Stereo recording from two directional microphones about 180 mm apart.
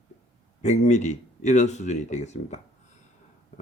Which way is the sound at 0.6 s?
40° left (ahead or behind).